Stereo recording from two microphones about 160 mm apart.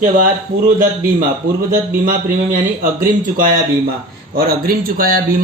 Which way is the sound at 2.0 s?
60° right (ahead or behind).